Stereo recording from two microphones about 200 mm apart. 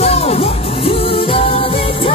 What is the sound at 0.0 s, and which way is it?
Music, 30° left (ahead or behind).